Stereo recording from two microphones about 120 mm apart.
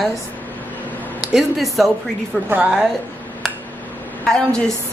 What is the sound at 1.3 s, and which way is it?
Speech, centre (ahead or behind).